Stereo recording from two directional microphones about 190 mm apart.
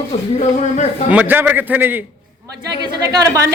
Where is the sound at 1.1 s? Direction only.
10° right (ahead or behind).